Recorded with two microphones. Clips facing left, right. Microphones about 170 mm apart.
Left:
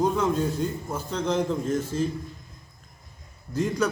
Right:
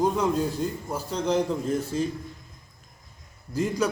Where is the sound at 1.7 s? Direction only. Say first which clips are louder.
Even; centre (ahead or behind).